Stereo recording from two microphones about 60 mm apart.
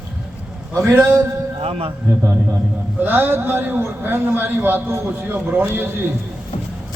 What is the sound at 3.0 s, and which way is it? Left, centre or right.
A man's voice, right.